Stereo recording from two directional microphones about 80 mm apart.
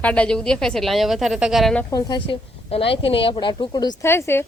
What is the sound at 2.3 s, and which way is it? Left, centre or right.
A woman's voice, left.